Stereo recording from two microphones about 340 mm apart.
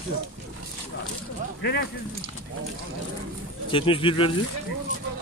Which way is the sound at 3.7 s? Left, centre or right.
Centre.